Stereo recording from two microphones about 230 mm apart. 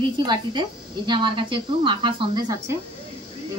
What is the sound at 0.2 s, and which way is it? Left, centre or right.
A woman's voice, centre.